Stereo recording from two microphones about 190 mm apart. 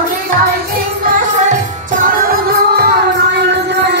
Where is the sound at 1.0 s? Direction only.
45° right (ahead or behind).